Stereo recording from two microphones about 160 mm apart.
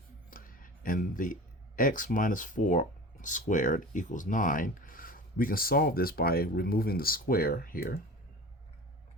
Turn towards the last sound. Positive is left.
turn(degrees=65)  # may be behind; listen again after turning